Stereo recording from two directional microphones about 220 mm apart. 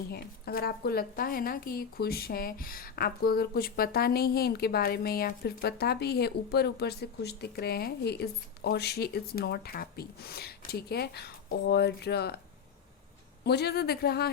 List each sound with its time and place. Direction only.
0.1 s speech: 45° left (ahead or behind)
13.4 s speech: 50° left (ahead or behind)